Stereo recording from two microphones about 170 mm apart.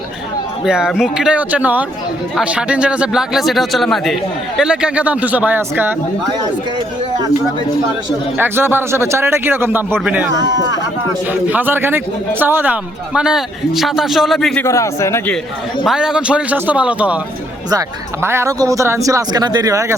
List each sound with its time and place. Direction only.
0.6 s speech: 5° right (ahead or behind)
8.4 s a man's voice: 15° right (ahead or behind)
10.3 s speech: 25° right (ahead or behind)
11.3 s a man's voice: 10° right (ahead or behind)
14.6 s speech: 15° left (ahead or behind)
15.8 s a man's voice: centre (ahead or behind); by 20.0 s 20° right (ahead or behind)